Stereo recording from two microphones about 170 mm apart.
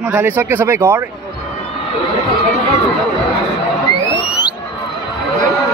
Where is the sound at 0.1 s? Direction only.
15° right (ahead or behind).